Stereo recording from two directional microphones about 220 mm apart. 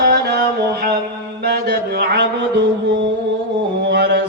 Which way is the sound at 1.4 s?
45° right (ahead or behind).